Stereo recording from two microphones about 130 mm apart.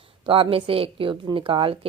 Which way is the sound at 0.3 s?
45° right (ahead or behind).